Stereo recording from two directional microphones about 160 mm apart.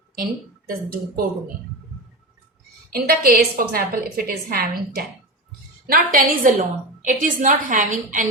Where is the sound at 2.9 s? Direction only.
70° right (ahead or behind).